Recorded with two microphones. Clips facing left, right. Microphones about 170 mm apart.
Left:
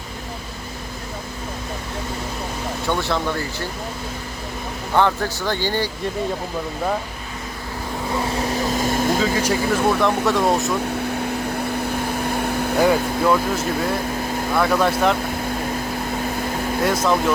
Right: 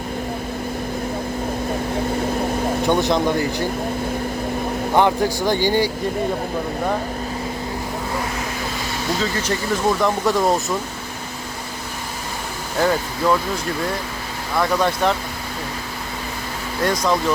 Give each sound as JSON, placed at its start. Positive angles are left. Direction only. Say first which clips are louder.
{"t": 2.8, "sound": "speech", "louder": "right 4 dB", "side_deg": -15}
{"t": 4.9, "sound": "speech", "louder": "right 2 dB", "side_deg": -15}
{"t": 8.8, "sound": "vehicle", "louder": "left 5 dB", "side_deg": 50}
{"t": 9.2, "sound": "speech", "louder": "left 3 dB", "side_deg": 10}
{"t": 12.8, "sound": "speech", "louder": "left 1 dB", "side_deg": 10}
{"t": 14.6, "sound": "speech", "louder": "even", "side_deg": 5}
{"t": 16.8, "sound": "speech", "louder": "even", "side_deg": 5}